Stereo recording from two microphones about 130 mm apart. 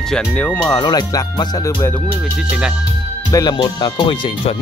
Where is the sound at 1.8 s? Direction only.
15° left (ahead or behind).